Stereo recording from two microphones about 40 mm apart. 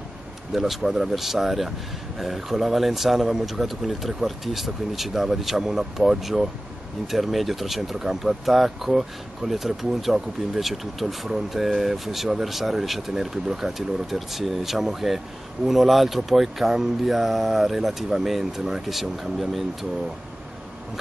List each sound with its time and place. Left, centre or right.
0.7 s speech: centre